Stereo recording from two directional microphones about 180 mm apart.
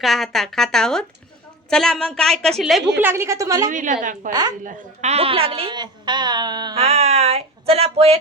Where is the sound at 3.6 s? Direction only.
45° right (ahead or behind); by 6.8 s 25° right (ahead or behind).